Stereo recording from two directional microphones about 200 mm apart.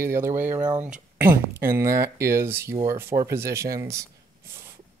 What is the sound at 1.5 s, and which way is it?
Speech, 15° right (ahead or behind).